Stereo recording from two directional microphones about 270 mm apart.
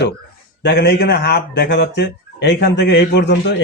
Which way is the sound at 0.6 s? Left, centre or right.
Left.